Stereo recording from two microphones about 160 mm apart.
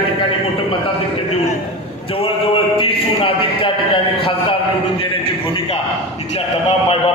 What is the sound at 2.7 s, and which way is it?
Speech, 35° left (ahead or behind).